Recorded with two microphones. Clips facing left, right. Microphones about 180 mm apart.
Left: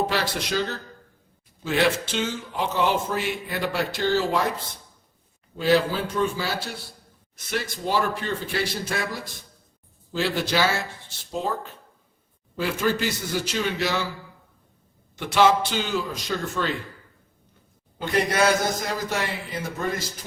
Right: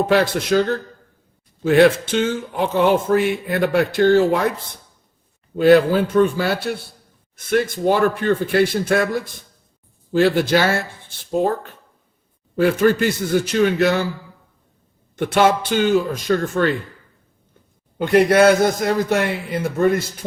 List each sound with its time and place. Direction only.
0.1 s speech: 55° right (ahead or behind)
5.5 s a man's voice: 60° right (ahead or behind)
12.5 s a man's voice: 55° right (ahead or behind)
15.1 s speech: 55° right (ahead or behind)
17.9 s speech: 60° right (ahead or behind)